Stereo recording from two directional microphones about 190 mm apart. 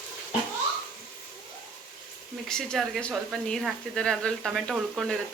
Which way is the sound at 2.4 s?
5° left (ahead or behind).